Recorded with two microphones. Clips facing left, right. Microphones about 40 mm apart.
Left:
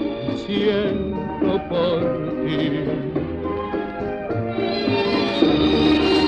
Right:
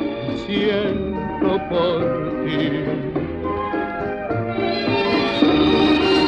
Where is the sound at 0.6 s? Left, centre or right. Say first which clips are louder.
Even; centre.